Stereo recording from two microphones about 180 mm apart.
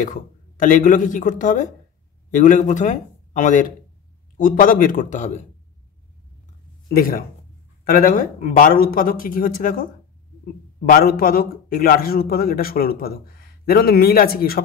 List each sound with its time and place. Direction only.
0.0 s speech: 45° left (ahead or behind)
6.9 s a man's voice: 55° left (ahead or behind)